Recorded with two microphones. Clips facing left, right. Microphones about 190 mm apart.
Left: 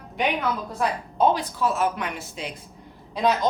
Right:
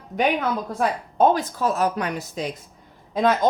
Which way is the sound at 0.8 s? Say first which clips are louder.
Right 3 dB; 45° right (ahead or behind).